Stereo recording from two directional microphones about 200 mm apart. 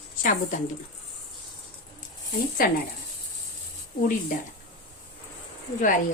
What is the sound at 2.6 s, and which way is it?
Speech, 45° left (ahead or behind).